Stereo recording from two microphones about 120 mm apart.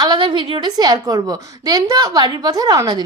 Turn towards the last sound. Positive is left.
turn(degrees=-35)  # may be behind; listen again after turning